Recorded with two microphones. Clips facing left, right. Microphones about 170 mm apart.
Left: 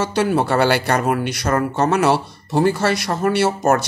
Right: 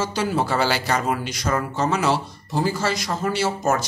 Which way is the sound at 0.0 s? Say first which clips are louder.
Left 5 dB; 65° left (ahead or behind).